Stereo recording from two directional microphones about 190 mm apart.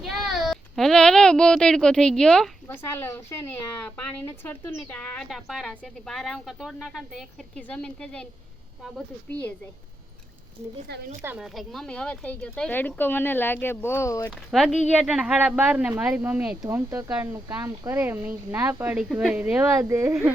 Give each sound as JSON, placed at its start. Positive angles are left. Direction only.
{"t": 0.0, "sound": "speech", "side_deg": 0}
{"t": 10.9, "sound": "speech", "side_deg": -60}
{"t": 11.3, "sound": "speech", "side_deg": 0}
{"t": 14.5, "sound": "speech", "side_deg": 0}
{"t": 19.8, "sound": "speech", "side_deg": -15}